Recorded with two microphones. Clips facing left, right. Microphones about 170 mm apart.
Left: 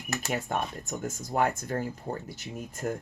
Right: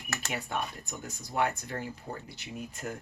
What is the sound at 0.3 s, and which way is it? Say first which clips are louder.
Speech: left 4 dB; 45° left (ahead or behind).